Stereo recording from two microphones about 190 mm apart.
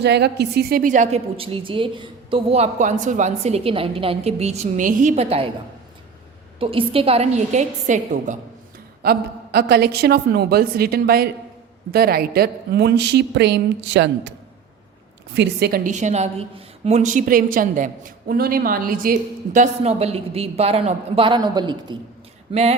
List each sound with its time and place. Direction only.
0.0 s a woman's voice: 60° right (ahead or behind); by 5.5 s 30° right (ahead or behind)
6.6 s a woman's voice: 30° right (ahead or behind)
9.0 s a woman's voice: 55° right (ahead or behind)
19.5 s a woman's voice: 35° right (ahead or behind)